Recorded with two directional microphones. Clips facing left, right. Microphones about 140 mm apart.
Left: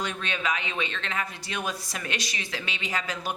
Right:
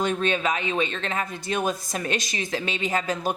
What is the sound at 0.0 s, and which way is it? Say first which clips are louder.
Speech: right 7 dB; 45° right (ahead or behind).